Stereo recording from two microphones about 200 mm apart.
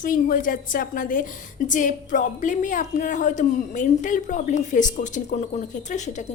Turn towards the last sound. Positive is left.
turn(degrees=35)  # may be behind; listen again after turning